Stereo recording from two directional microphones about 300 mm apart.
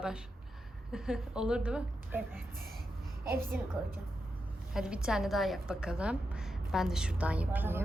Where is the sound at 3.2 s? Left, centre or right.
Right.